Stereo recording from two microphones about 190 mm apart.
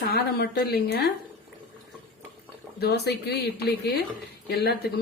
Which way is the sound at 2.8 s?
60° left (ahead or behind).